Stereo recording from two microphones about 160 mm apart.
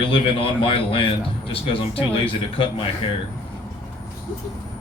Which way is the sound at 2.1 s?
35° left (ahead or behind).